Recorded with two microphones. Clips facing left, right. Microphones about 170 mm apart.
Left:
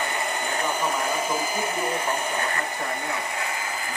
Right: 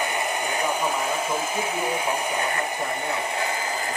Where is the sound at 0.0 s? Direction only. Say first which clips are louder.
Right 2 dB; 15° right (ahead or behind).